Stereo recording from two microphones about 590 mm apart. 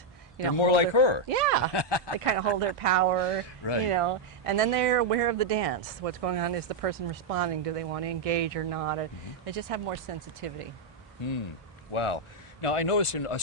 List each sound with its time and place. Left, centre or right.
0.6 s a man's voice: left
1.3 s speech: right
1.7 s a man's voice: left
2.1 s speech: right
3.2 s a man's voice: left
3.8 s speech: right
11.9 s speech: left